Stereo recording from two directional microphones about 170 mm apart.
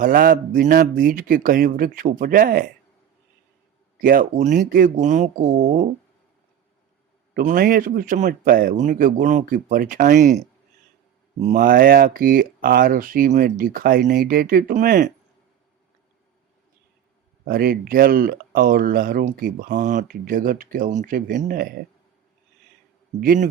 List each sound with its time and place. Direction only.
0.0 s speech: 60° right (ahead or behind)
4.0 s a man's voice: 55° right (ahead or behind)
7.3 s a man's voice: 55° right (ahead or behind)
17.4 s speech: 60° right (ahead or behind)
23.2 s speech: 55° right (ahead or behind)